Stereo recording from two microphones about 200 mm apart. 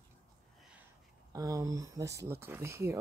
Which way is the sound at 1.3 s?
15° right (ahead or behind).